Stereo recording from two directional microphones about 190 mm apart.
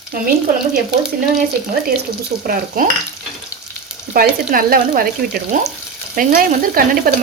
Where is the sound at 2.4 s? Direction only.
50° right (ahead or behind).